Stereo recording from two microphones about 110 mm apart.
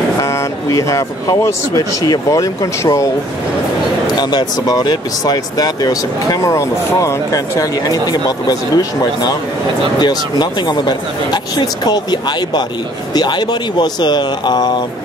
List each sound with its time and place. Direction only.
0.2 s vehicle: 30° left (ahead or behind)
1.4 s speech: 30° left (ahead or behind)
4.1 s speech: 40° left (ahead or behind)